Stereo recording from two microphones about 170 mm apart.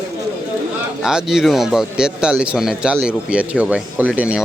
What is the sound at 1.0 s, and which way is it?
Speech, 5° right (ahead or behind).